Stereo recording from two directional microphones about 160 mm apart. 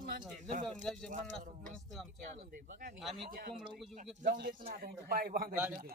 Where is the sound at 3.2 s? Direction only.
60° right (ahead or behind).